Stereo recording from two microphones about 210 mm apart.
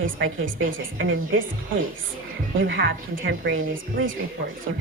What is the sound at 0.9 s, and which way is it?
Speech, 65° right (ahead or behind).